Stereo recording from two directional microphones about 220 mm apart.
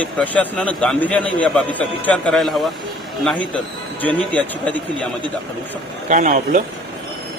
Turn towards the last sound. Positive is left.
turn(degrees=-35)  # may be behind; listen again after turning